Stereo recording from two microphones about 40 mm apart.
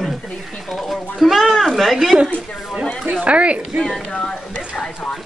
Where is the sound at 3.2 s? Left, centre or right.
Right.